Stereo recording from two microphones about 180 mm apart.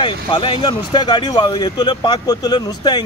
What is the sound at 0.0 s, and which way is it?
Speech, 30° left (ahead or behind).